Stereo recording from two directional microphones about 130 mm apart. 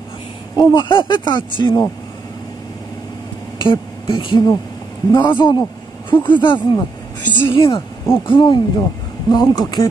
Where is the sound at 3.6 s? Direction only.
40° left (ahead or behind).